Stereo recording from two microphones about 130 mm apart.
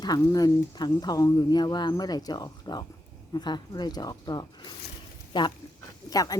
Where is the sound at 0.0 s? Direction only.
30° left (ahead or behind).